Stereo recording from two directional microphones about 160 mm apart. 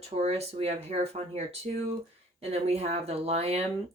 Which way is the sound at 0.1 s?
40° right (ahead or behind).